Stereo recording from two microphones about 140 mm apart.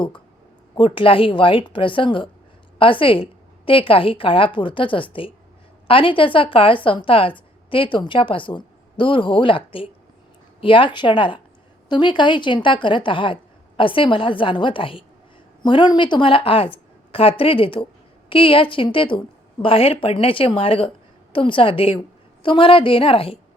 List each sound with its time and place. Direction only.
0.8 s a woman's voice: 40° left (ahead or behind)